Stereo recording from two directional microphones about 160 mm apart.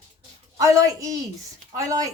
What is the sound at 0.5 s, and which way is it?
Speech, 20° right (ahead or behind).